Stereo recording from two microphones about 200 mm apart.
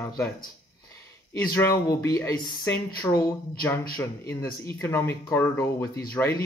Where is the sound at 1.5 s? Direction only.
15° left (ahead or behind).